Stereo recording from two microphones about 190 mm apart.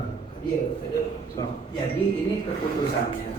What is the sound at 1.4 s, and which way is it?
Speech, 20° left (ahead or behind).